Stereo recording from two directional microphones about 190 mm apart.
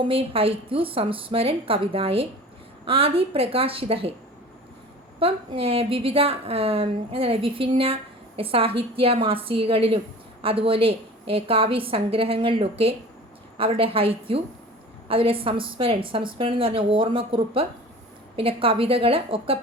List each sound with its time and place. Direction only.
0.0 s a woman's voice: 30° right (ahead or behind)
5.2 s a woman's voice: 30° right (ahead or behind)